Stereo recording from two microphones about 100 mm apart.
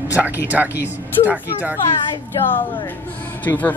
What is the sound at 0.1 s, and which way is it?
A child's voice, 15° right (ahead or behind).